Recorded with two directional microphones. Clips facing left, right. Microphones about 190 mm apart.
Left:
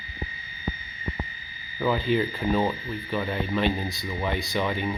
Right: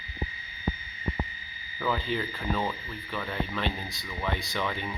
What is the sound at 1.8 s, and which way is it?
Speech, 15° left (ahead or behind).